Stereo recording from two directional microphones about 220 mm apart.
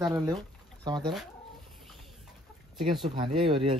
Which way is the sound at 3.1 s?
25° right (ahead or behind).